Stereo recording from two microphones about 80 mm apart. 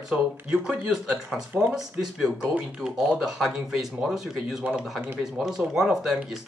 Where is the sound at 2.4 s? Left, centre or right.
Right.